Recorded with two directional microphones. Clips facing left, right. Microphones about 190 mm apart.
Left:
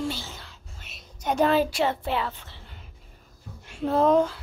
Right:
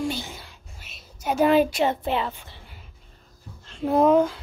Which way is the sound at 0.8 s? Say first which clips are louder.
Right 1 dB; centre (ahead or behind).